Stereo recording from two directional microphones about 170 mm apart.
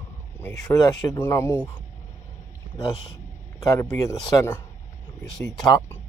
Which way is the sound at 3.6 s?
15° left (ahead or behind).